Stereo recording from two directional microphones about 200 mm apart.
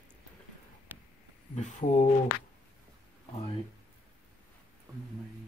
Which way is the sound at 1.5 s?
40° left (ahead or behind).